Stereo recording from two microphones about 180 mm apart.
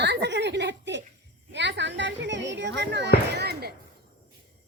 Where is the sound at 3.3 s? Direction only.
60° right (ahead or behind).